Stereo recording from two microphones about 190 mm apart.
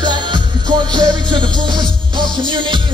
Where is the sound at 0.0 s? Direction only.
25° right (ahead or behind).